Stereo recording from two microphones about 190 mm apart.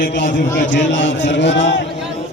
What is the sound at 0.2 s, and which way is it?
Speech, 45° left (ahead or behind).